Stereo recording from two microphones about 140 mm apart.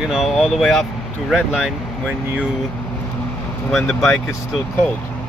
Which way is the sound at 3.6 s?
Centre (ahead or behind).